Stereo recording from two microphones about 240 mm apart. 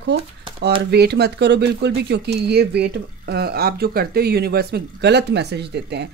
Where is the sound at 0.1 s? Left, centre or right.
Right.